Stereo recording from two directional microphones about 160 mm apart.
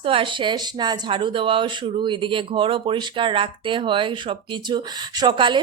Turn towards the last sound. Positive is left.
turn(degrees=-30)  # may be behind; listen again after turning